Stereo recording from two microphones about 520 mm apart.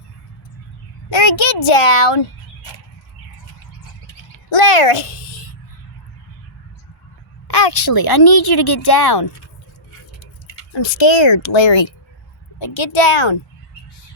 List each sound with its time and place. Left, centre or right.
1.1 s speech: left
4.5 s speech: left
7.4 s a woman's voice: left
10.8 s a woman's voice: left